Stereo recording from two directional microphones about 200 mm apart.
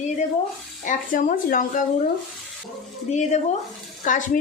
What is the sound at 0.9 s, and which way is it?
Speech, 40° left (ahead or behind).